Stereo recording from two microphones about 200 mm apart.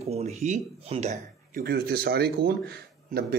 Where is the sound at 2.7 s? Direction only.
50° right (ahead or behind).